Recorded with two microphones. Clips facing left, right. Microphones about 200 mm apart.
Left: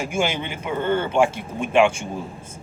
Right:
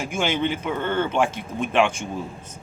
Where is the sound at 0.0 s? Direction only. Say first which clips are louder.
Even; 10° left (ahead or behind).